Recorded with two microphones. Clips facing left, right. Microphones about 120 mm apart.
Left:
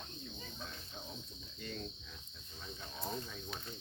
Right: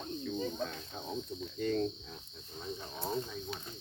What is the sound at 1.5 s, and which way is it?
Cricket, 45° right (ahead or behind).